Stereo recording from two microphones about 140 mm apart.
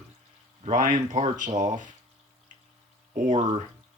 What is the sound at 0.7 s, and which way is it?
Speech, 65° right (ahead or behind).